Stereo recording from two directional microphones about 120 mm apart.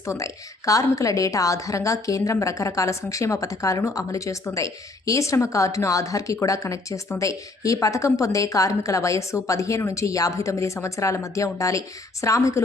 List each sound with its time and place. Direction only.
0.0 s a woman's voice: 25° left (ahead or behind)